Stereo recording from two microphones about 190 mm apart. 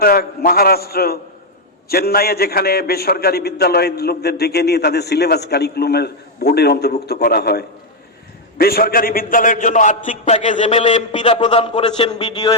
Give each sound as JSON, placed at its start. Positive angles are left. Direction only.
{"t": 0.0, "sound": "a man's voice", "side_deg": 50}